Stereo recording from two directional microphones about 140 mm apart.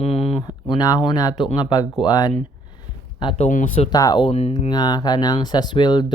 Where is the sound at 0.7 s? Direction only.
30° left (ahead or behind).